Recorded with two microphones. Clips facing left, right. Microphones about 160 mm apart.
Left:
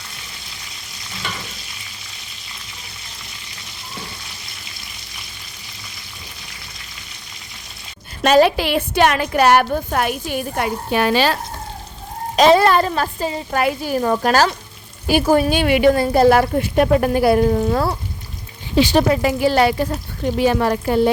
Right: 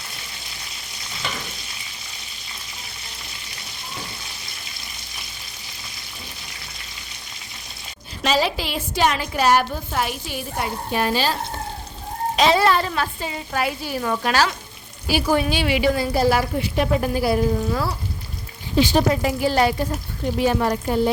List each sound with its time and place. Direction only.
8.2 s a woman's voice: 55° left (ahead or behind)
12.4 s a woman's voice: 50° left (ahead or behind)
18.8 s speech: 75° left (ahead or behind)
20.4 s a woman's voice: 90° left